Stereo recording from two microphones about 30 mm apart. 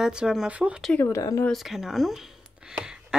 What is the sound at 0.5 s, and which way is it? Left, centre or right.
Speech, right.